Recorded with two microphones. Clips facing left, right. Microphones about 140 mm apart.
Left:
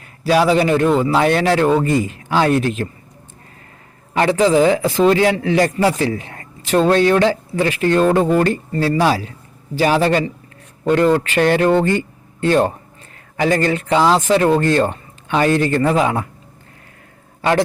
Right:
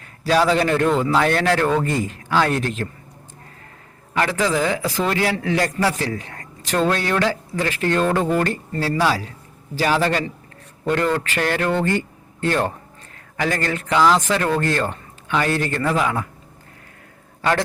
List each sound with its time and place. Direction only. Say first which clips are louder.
0.3 s speech: left 3 dB; 15° left (ahead or behind)
4.1 s speech: left 7 dB; 20° left (ahead or behind)